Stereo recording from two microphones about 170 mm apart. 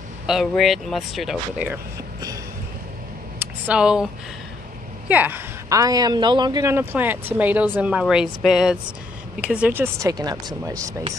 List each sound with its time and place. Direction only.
0.3 s speech: centre (ahead or behind)
3.3 s a sound: 5° right (ahead or behind)
5.0 s speech: 10° right (ahead or behind)